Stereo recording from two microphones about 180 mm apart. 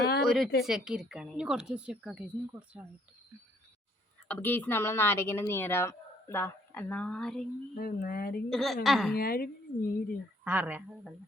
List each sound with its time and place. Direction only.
0.0 s a sound: 60° left (ahead or behind)
0.6 s a woman's voice: 5° right (ahead or behind)
4.3 s a woman's voice: 10° left (ahead or behind)
7.8 s speech: 55° left (ahead or behind)
8.4 s a woman's voice: centre (ahead or behind)
9.1 s speech: 55° left (ahead or behind)
10.4 s speech: 10° right (ahead or behind)